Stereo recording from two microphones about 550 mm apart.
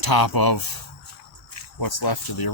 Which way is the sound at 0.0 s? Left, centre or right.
Left.